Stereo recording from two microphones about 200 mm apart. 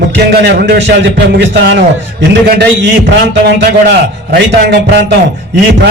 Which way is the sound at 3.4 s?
55° right (ahead or behind).